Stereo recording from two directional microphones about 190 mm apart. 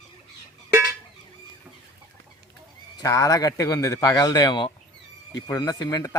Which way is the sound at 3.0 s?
20° left (ahead or behind).